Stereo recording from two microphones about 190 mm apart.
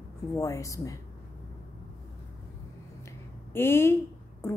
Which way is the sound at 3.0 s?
10° left (ahead or behind).